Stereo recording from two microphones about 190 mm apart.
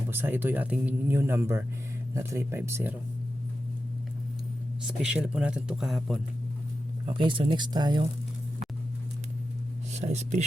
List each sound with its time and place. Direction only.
0.1 s speech: 10° right (ahead or behind)
4.8 s speech: 5° right (ahead or behind)
7.0 s speech: 25° right (ahead or behind)
9.9 s speech: 35° right (ahead or behind)